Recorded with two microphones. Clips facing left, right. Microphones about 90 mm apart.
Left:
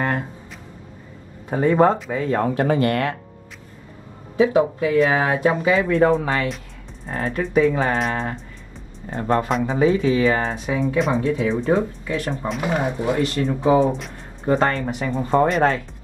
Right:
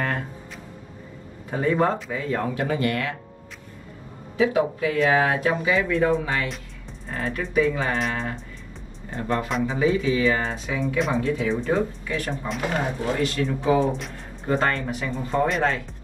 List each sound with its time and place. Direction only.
1.5 s speech: 30° left (ahead or behind); by 3.2 s 45° left (ahead or behind)
4.4 s speech: 30° left (ahead or behind)
5.6 s speech: 35° left (ahead or behind)
12.3 s speech: centre (ahead or behind)
12.6 s speech: 15° left (ahead or behind)
13.4 s speech: 35° left (ahead or behind)
13.8 s speech: centre (ahead or behind)
14.4 s speech: 35° left (ahead or behind)